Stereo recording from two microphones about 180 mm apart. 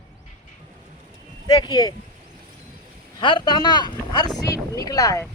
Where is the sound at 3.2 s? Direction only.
25° left (ahead or behind).